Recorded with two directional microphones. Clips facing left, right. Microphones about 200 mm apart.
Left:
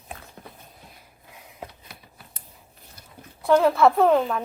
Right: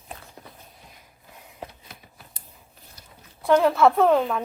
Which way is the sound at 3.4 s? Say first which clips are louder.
Even; centre (ahead or behind).